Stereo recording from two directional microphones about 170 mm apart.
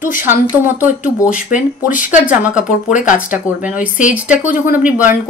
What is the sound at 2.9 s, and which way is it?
Speech, 50° left (ahead or behind).